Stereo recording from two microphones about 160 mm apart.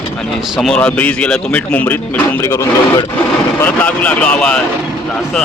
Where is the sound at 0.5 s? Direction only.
5° left (ahead or behind).